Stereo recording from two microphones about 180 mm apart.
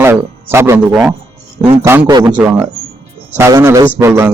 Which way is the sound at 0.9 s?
Centre (ahead or behind).